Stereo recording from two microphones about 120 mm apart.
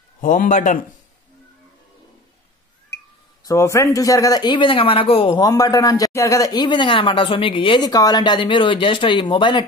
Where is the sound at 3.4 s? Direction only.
25° left (ahead or behind); by 5.4 s 50° left (ahead or behind).